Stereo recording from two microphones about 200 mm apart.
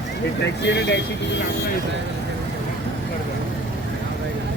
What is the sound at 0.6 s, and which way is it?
Speech, 60° left (ahead or behind).